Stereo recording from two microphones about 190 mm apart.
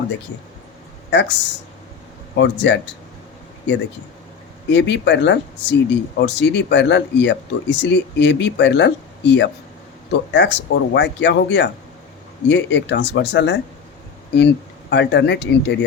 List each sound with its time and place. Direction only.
1.1 s speech: 65° left (ahead or behind)
4.7 s speech: 70° left (ahead or behind)